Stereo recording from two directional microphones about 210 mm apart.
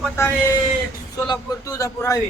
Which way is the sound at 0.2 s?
15° left (ahead or behind).